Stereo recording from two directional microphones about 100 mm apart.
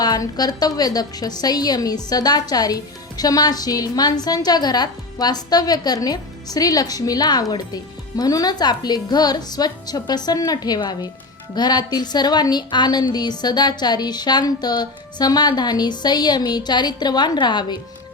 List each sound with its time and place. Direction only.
0.0 s a woman's voice: 40° left (ahead or behind)